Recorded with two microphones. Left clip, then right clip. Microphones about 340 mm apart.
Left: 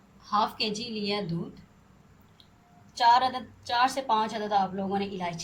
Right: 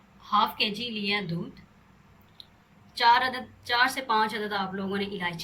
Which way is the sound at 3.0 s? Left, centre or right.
Centre.